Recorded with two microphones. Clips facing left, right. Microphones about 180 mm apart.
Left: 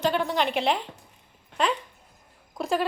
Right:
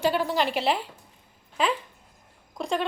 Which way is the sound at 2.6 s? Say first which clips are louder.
Left 2 dB; 5° left (ahead or behind).